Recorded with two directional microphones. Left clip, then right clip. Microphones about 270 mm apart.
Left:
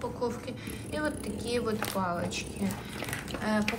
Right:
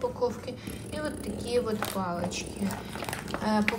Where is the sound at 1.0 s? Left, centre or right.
Centre.